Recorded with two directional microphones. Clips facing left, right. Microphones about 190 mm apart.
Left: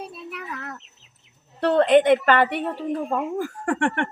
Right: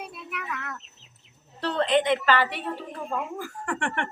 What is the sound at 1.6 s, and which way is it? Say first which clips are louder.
A woman's voice: left 7 dB; 55° left (ahead or behind).